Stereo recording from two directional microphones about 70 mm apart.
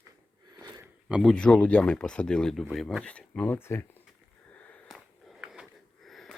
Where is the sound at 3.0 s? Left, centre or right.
Centre.